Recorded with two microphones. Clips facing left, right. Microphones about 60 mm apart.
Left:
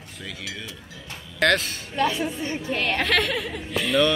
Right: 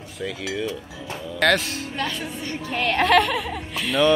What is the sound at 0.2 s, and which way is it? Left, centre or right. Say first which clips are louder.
Speech: right 9 dB; centre.